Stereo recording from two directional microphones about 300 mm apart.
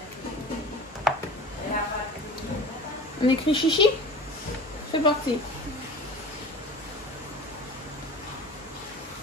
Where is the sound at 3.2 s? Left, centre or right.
Centre.